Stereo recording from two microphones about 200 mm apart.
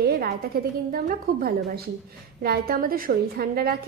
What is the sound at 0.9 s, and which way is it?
A woman's voice, 45° right (ahead or behind).